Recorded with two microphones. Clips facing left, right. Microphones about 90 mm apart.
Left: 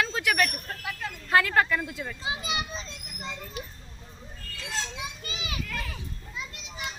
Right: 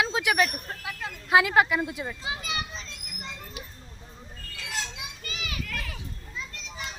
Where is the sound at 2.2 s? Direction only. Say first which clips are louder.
Left 1 dB; 20° left (ahead or behind).